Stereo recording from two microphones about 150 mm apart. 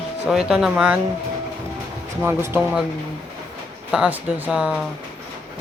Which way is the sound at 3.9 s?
5° right (ahead or behind).